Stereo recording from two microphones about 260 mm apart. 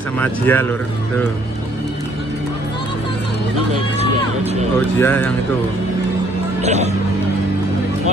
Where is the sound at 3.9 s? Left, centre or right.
Right.